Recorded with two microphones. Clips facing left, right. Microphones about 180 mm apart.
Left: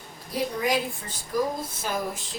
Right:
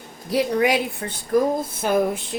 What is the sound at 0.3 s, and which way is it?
A woman's voice, 75° right (ahead or behind).